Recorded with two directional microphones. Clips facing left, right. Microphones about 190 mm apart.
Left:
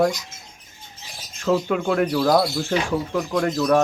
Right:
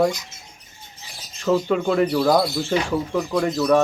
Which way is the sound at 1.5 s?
5° left (ahead or behind).